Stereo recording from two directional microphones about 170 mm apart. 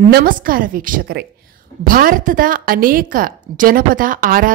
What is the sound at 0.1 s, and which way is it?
A woman's voice, 55° right (ahead or behind).